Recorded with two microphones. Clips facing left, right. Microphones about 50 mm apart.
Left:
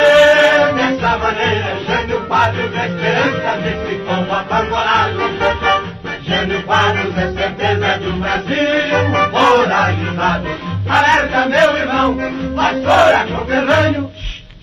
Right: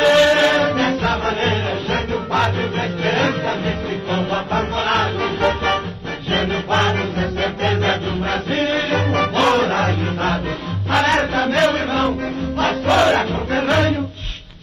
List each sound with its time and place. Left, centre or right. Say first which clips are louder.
0.0 s music: left 5 dB; left
0.7 s music: left 4 dB; left
1.1 s music: left 4 dB; left
4.5 s music: left 5 dB; left
5.4 s music: left 4 dB; left
9.7 s music: left 5 dB; left
10.9 s music: left 5 dB; left
11.5 s chant: left 5 dB; left
12.1 s music: left 4 dB; left